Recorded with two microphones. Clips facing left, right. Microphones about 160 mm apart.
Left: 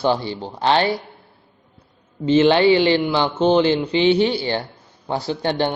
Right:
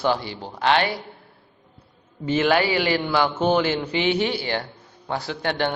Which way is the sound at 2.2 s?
25° left (ahead or behind).